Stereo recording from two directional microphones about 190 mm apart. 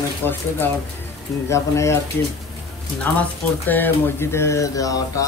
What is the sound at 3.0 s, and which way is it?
Speech, 10° left (ahead or behind).